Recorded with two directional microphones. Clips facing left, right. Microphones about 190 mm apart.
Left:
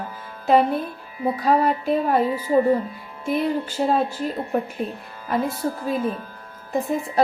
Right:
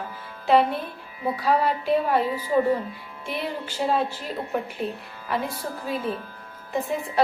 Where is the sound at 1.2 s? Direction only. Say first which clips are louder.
Left 3 dB; 45° left (ahead or behind).